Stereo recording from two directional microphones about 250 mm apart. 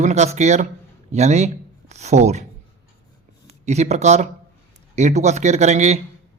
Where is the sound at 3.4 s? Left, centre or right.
Right.